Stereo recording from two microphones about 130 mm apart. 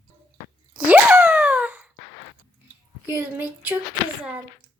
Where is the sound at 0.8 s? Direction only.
10° right (ahead or behind).